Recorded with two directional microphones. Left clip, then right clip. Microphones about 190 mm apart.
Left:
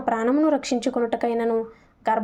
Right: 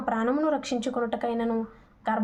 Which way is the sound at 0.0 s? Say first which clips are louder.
Left 5 dB; 25° left (ahead or behind).